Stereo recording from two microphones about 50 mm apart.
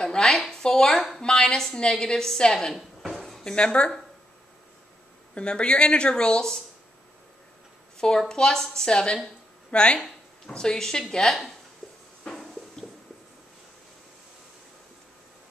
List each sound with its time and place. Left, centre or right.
0.0 s a woman's voice: centre
2.7 s a sound: centre
3.4 s speech: left
5.3 s speech: left
8.0 s a woman's voice: centre
9.9 s speech: centre
11.8 s a sound: centre